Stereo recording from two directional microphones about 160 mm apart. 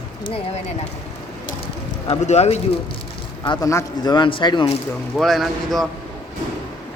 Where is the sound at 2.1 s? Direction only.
45° left (ahead or behind).